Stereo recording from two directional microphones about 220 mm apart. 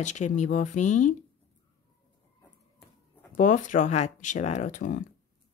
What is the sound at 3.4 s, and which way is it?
Speech, 35° left (ahead or behind).